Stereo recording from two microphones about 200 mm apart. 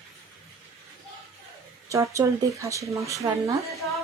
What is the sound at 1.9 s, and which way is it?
Speech, 15° right (ahead or behind).